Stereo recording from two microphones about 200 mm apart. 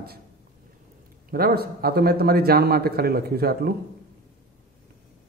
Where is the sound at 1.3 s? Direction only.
50° right (ahead or behind).